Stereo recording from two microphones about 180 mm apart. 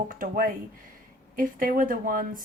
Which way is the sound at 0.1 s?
50° right (ahead or behind).